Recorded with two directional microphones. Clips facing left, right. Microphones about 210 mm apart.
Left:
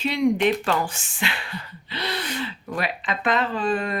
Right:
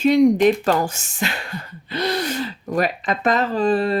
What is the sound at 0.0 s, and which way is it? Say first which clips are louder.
Speech: right 7 dB; 45° right (ahead or behind).